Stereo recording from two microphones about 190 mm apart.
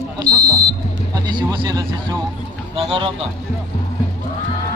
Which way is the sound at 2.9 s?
30° right (ahead or behind).